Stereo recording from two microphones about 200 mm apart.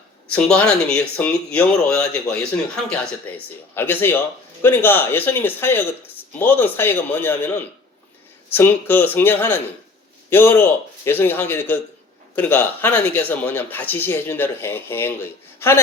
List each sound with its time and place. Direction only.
0.3 s speech: 5° left (ahead or behind)